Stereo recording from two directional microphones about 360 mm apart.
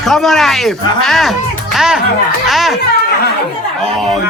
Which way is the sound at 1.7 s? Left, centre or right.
Centre.